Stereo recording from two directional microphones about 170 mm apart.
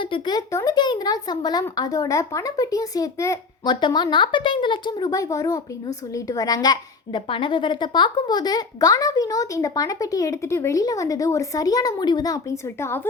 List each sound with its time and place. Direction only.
0.0 s speech: 25° left (ahead or behind)